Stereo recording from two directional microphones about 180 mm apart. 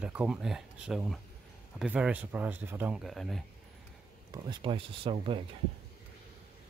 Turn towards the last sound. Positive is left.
turn(degrees=-30)  # may be behind; listen again after turning